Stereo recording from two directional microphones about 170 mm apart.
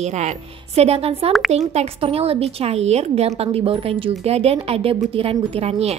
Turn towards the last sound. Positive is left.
turn(degrees=-35)  # may be behind; listen again after turning